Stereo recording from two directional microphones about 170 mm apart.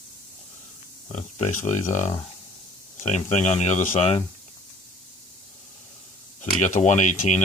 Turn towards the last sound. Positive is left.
turn(degrees=45)  # may be behind; listen again after turning